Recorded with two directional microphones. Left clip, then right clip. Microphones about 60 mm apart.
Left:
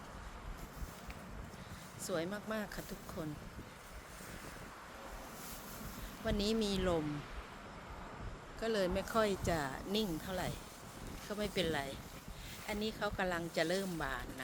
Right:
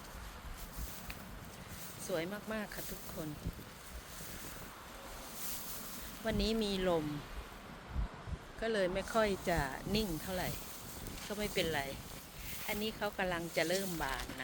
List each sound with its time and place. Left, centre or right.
2.0 s speech: centre
6.2 s speech: centre
8.6 s speech: centre